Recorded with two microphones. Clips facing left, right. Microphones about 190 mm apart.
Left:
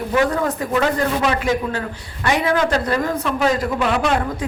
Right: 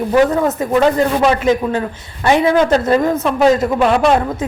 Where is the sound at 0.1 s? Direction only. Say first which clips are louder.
Right 5 dB; 25° right (ahead or behind).